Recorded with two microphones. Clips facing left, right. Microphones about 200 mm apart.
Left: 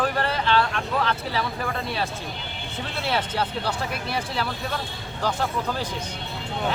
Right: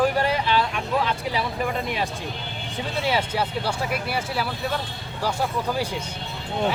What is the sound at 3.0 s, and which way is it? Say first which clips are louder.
Speech: right 1 dB; 10° right (ahead or behind).